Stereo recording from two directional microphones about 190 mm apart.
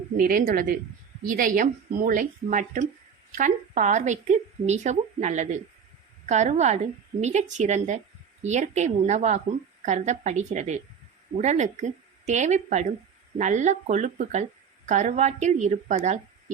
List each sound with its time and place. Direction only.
0.2 s speech: 45° right (ahead or behind)